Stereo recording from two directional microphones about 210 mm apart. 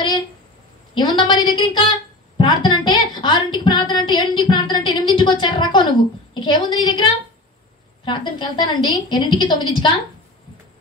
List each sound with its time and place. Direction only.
0.9 s a woman's voice: 20° left (ahead or behind)
8.0 s a woman's voice: 20° left (ahead or behind)